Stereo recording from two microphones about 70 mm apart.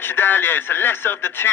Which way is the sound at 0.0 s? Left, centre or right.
Left.